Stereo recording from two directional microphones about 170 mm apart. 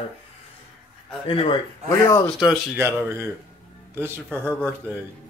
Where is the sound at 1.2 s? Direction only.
35° left (ahead or behind).